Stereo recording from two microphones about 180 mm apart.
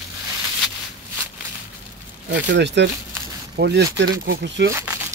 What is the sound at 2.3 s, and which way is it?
Speech, 75° right (ahead or behind).